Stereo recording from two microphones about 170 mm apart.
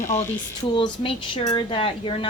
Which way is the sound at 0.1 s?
15° left (ahead or behind).